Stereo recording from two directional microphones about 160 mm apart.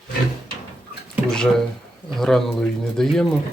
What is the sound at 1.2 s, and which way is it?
Speech, 5° left (ahead or behind).